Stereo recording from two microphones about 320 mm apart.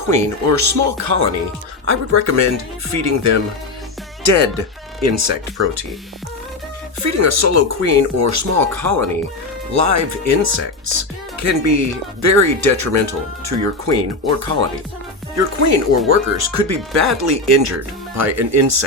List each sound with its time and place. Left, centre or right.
0.1 s speech: right
7.0 s speech: right